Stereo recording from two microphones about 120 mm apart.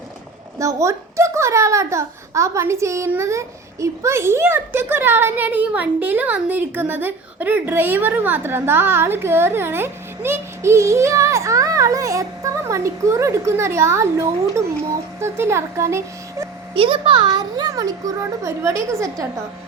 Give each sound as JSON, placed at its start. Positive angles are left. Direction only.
{"t": 0.6, "sound": "a child's voice", "side_deg": -25}
{"t": 16.7, "sound": "a child's voice", "side_deg": -45}